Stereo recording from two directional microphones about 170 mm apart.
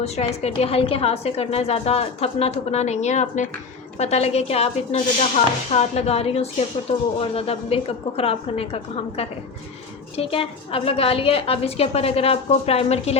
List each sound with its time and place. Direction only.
0.0 s a woman's voice: 40° left (ahead or behind)